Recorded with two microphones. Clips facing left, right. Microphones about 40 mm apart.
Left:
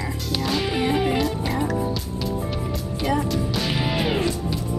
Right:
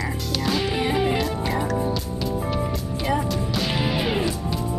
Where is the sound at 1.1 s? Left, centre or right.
Centre.